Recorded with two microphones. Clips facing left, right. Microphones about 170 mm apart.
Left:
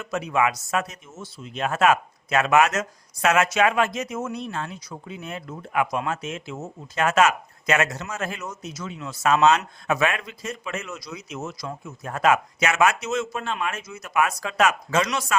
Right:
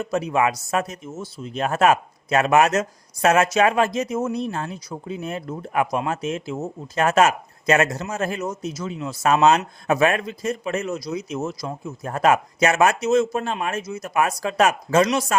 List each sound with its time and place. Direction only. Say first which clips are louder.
0.0 s speech: right 3 dB; 35° right (ahead or behind)